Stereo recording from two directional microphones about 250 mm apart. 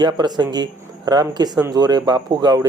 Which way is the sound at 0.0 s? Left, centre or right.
Centre.